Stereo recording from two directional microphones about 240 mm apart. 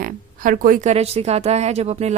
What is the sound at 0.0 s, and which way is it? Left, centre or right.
A woman's voice, right.